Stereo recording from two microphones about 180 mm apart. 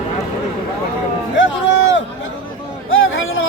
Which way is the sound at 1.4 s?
90° left.